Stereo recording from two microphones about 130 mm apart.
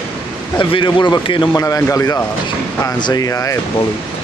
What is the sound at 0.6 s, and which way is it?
Speech, 35° left (ahead or behind).